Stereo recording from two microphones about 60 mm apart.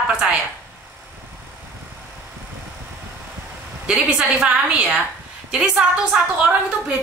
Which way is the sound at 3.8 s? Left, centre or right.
Centre.